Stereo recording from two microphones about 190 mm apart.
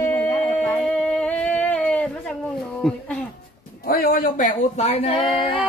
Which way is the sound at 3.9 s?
50° left (ahead or behind).